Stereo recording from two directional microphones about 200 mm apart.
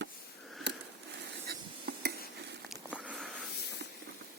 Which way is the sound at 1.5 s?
50° right (ahead or behind).